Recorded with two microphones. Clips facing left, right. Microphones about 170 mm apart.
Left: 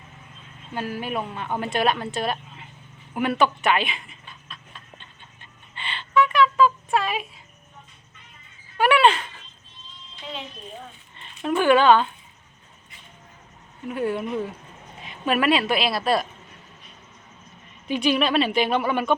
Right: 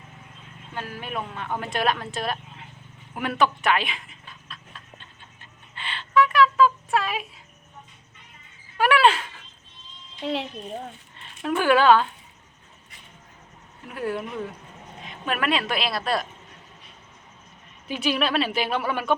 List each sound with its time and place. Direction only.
0.7 s speech: 10° left (ahead or behind)
3.2 s a sound: centre (ahead or behind)
8.8 s a sound: centre (ahead or behind)
10.2 s speech: 75° right (ahead or behind)
11.2 s speech: centre (ahead or behind)
13.8 s speech: centre (ahead or behind)
17.8 s speech: 5° right (ahead or behind)